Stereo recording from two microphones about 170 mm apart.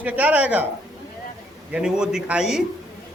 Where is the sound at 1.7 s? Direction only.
5° right (ahead or behind).